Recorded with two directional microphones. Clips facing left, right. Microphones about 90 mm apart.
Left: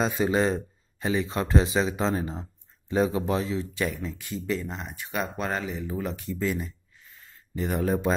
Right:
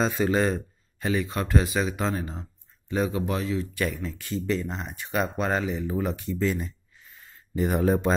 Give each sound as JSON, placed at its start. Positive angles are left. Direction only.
{"t": 0.0, "sound": "speech", "side_deg": 15}
{"t": 7.5, "sound": "speech", "side_deg": -10}